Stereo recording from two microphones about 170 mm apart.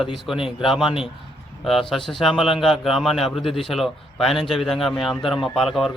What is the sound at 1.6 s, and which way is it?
A man's voice, centre (ahead or behind).